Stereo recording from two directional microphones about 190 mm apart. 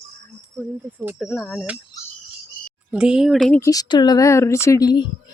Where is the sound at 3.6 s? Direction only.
20° left (ahead or behind).